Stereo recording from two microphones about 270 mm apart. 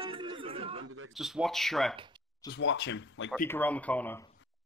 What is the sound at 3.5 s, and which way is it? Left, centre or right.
Speech, centre.